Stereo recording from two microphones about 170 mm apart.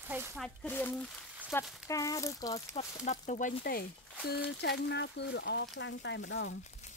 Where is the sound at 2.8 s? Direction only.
45° left (ahead or behind); by 6.5 s 90° left.